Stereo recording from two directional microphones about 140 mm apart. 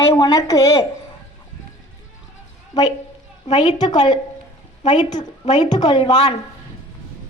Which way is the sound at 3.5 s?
30° left (ahead or behind).